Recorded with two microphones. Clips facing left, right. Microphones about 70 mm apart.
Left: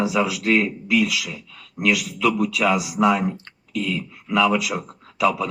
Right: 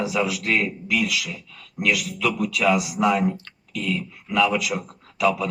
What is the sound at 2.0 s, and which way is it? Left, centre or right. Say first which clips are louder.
A man's voice: left 3 dB; left.